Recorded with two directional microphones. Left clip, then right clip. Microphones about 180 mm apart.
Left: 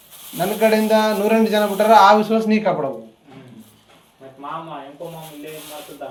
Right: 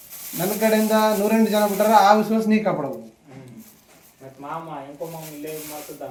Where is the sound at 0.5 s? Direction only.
15° right (ahead or behind).